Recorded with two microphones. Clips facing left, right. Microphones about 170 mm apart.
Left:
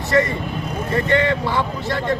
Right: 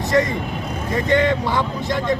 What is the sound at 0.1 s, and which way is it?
Speech, 15° right (ahead or behind).